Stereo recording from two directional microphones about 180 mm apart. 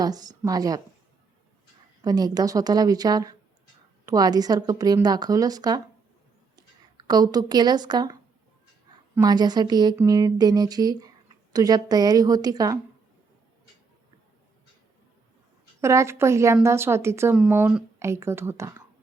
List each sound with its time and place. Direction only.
0.0 s a woman's voice: 20° right (ahead or behind)
2.0 s a woman's voice: 20° right (ahead or behind)
9.1 s a woman's voice: 20° right (ahead or behind)
15.8 s a woman's voice: 15° right (ahead or behind)